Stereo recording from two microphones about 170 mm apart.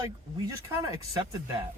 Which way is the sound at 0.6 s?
20° right (ahead or behind).